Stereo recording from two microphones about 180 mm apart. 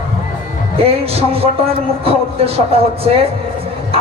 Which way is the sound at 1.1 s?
30° right (ahead or behind).